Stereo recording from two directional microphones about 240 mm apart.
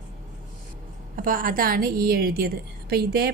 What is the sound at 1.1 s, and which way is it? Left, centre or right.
A woman's voice, right.